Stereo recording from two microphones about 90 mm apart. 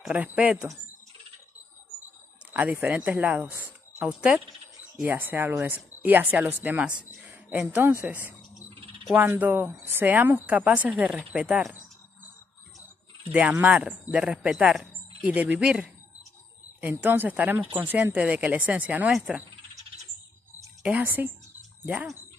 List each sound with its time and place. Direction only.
0.1 s speech: 15° right (ahead or behind)
2.5 s speech: 20° right (ahead or behind)
5.0 s a woman's voice: 20° right (ahead or behind)
13.3 s speech: 15° right (ahead or behind)
17.0 s speech: 20° right (ahead or behind)
20.9 s speech: 20° right (ahead or behind)